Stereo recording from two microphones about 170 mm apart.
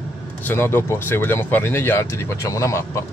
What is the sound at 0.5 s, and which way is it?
Speech, 15° left (ahead or behind).